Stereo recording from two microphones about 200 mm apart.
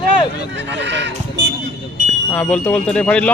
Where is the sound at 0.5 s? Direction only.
60° right (ahead or behind).